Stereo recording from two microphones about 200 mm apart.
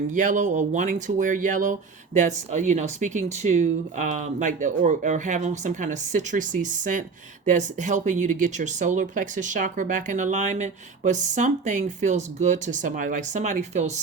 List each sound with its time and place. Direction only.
0.1 s speech: 40° right (ahead or behind)